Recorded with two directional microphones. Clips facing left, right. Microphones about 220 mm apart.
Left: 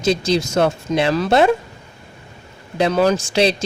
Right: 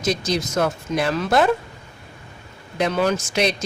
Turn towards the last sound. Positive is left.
turn(degrees=30)  # may be behind; listen again after turning